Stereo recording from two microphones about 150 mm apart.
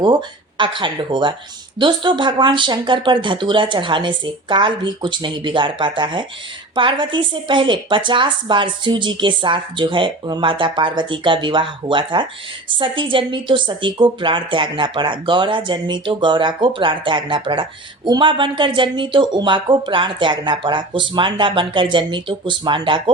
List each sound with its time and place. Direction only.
0.0 s speech: 30° right (ahead or behind)